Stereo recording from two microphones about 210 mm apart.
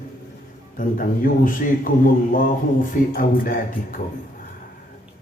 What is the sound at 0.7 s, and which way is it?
A man's voice, 40° left (ahead or behind).